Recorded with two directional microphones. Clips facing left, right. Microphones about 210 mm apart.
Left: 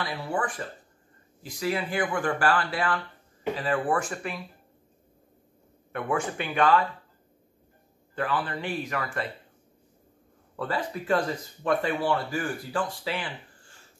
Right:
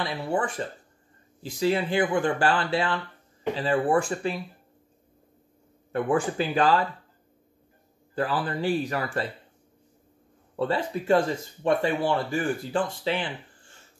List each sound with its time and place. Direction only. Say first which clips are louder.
0.0 s speech: right 3 dB; 25° right (ahead or behind)
5.9 s speech: right 4 dB; 30° right (ahead or behind)
8.1 s speech: right 2 dB; 35° right (ahead or behind)
10.5 s speech: right 4 dB; 25° right (ahead or behind)